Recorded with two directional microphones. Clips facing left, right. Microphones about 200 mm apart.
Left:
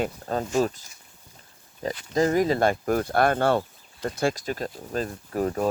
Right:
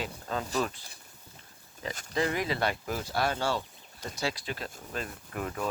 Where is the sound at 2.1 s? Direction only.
40° left (ahead or behind).